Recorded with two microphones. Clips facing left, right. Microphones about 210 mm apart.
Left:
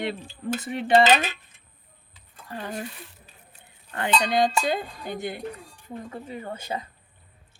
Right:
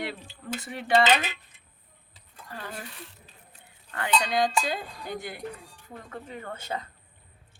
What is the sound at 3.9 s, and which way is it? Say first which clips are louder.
Speech: left 3 dB; 25° left (ahead or behind).